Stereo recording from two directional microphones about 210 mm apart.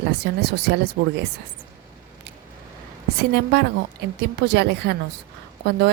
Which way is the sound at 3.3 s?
55° right (ahead or behind).